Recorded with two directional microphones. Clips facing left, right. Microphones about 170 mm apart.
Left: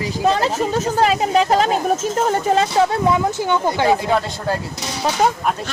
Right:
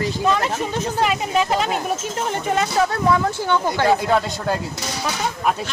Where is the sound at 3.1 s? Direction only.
15° left (ahead or behind).